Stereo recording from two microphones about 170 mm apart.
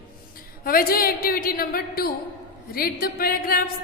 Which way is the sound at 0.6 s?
60° left (ahead or behind).